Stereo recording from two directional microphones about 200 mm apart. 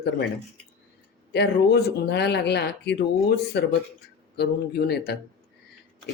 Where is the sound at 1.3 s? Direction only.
55° left (ahead or behind).